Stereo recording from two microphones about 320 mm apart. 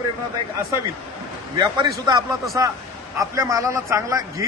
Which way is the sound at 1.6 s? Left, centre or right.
Centre.